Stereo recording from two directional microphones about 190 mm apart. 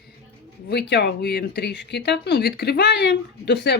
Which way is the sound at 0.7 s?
60° left (ahead or behind).